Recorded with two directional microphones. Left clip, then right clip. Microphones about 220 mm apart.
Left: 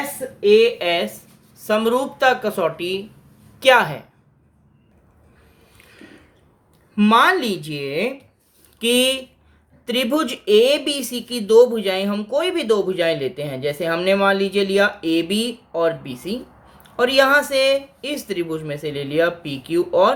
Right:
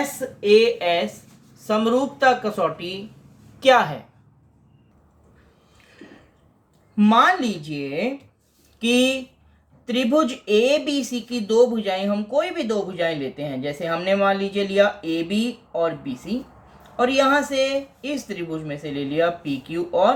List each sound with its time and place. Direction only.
0.3 s speech: 25° left (ahead or behind)
6.9 s speech: 40° left (ahead or behind)